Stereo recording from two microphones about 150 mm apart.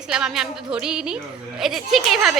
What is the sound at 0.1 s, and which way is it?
A woman's voice, 5° right (ahead or behind).